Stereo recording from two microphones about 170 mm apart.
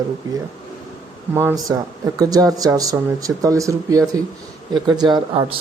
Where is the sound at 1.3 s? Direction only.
15° right (ahead or behind).